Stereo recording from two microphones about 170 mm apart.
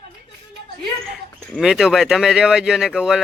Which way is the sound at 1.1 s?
Centre (ahead or behind).